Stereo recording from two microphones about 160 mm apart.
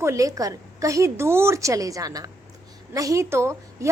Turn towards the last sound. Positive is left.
turn(degrees=-15)  # may be behind; listen again after turning